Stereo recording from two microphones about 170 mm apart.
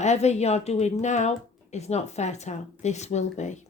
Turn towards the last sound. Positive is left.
turn(degrees=45)  # may be behind; listen again after turning